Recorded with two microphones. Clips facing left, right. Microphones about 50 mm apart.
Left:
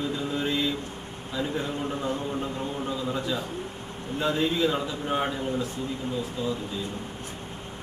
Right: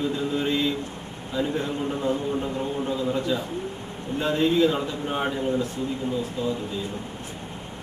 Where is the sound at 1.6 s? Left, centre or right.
Centre.